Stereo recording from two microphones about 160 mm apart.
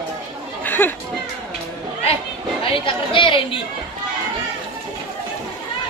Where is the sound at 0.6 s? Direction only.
10° left (ahead or behind).